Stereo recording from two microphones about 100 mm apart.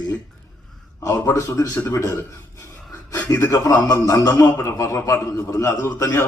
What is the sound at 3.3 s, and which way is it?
A man's voice, 30° left (ahead or behind).